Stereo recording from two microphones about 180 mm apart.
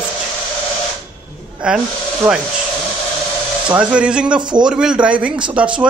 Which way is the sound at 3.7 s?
5° right (ahead or behind).